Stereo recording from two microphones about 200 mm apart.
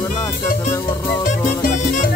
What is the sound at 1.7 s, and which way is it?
Music, 35° left (ahead or behind).